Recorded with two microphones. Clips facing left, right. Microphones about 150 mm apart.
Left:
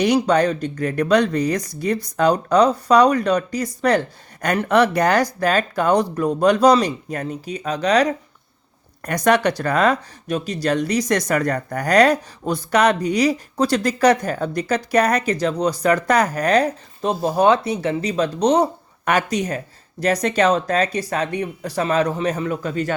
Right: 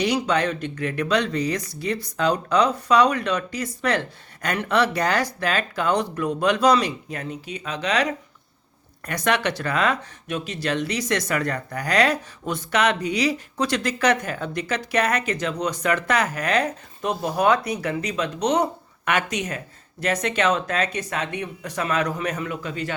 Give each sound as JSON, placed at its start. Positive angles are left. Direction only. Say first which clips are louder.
{"t": 0.0, "sound": "speech", "louder": "left 5 dB", "side_deg": 45}